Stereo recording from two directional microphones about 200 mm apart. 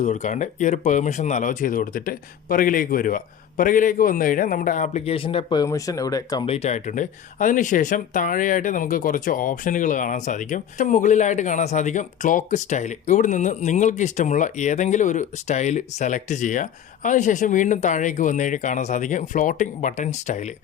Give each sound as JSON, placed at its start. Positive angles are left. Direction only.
{"t": 0.0, "sound": "speech", "side_deg": 35}